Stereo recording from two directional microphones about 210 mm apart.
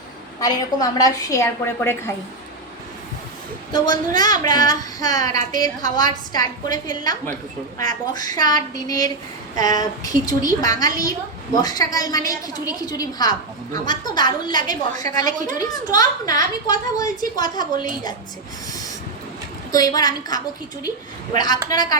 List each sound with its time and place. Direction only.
0.3 s a woman's voice: 20° left (ahead or behind)
3.7 s a woman's voice: 20° left (ahead or behind)
19.7 s a woman's voice: 20° left (ahead or behind)